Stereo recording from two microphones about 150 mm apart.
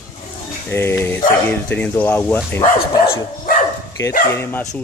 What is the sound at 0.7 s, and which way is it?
Speech, 15° left (ahead or behind).